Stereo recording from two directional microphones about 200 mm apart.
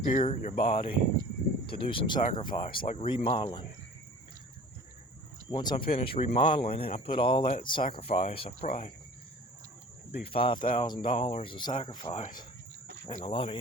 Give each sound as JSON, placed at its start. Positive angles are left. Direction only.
{"t": 0.0, "sound": "speech", "side_deg": 35}
{"t": 1.6, "sound": "speech", "side_deg": 25}
{"t": 2.8, "sound": "speech", "side_deg": 35}
{"t": 5.5, "sound": "speech", "side_deg": 20}
{"t": 10.3, "sound": "speech", "side_deg": 25}
{"t": 10.6, "sound": "speech", "side_deg": 40}
{"t": 10.8, "sound": "speech", "side_deg": 25}